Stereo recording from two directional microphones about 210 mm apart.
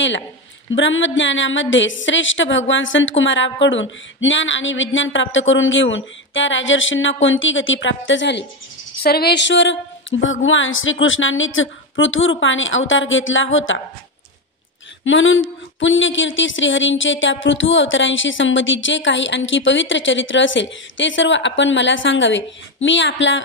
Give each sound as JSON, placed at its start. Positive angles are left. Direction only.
{"t": 0.7, "sound": "speech", "side_deg": 65}
{"t": 15.0, "sound": "speech", "side_deg": 70}